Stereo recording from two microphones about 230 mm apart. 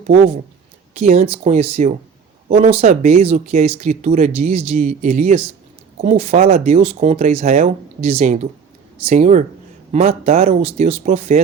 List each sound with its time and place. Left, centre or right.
0.9 s speech: right